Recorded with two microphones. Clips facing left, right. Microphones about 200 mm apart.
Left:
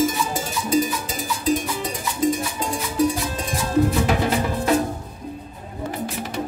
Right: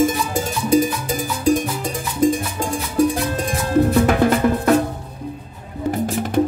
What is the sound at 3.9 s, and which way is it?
Music, 55° right (ahead or behind).